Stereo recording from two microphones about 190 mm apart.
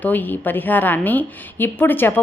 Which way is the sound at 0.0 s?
10° left (ahead or behind).